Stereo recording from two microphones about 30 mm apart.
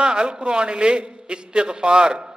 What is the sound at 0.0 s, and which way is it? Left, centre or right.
A man's voice, right.